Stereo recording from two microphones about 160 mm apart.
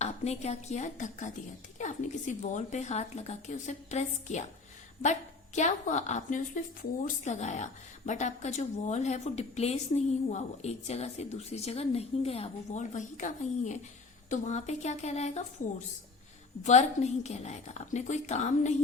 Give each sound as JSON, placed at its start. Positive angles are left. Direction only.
{"t": 0.0, "sound": "a woman's voice", "side_deg": 40}
{"t": 5.5, "sound": "a woman's voice", "side_deg": 45}
{"t": 16.6, "sound": "a woman's voice", "side_deg": 45}